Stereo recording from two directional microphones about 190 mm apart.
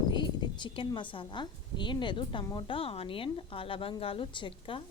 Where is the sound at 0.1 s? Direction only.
25° left (ahead or behind).